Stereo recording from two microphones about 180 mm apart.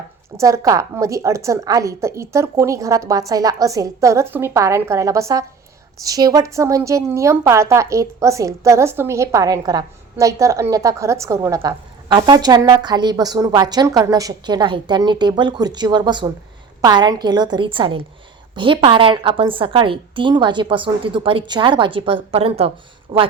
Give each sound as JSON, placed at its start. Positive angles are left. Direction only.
{"t": 0.3, "sound": "a woman's voice", "side_deg": -15}